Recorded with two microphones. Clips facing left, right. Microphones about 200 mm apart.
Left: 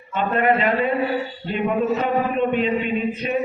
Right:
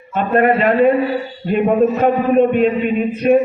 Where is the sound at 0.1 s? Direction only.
50° right (ahead or behind).